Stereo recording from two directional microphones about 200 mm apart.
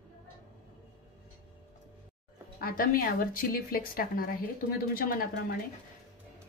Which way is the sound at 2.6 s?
45° left (ahead or behind).